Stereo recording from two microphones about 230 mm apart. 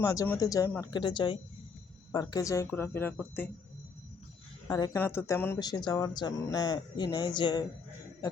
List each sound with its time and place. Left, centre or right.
0.0 s speech: centre
4.7 s speech: centre